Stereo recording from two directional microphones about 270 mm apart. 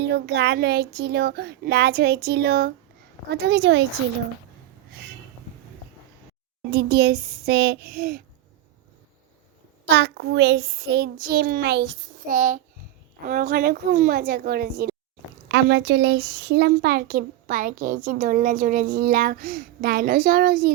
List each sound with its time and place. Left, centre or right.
0.0 s speech: right
6.7 s speech: right
9.9 s a child's voice: right